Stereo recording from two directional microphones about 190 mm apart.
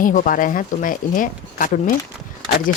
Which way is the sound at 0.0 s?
45° left (ahead or behind).